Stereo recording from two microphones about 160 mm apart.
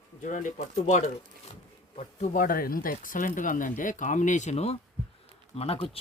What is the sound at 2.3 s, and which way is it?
Speech, 60° left (ahead or behind).